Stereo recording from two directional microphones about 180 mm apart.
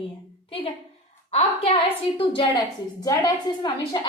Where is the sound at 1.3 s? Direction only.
35° left (ahead or behind).